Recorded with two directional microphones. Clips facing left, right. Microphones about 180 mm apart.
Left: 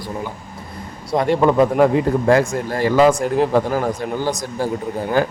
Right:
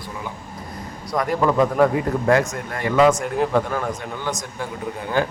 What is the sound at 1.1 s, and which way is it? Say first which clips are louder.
Speech: left 4 dB; 25° left (ahead or behind).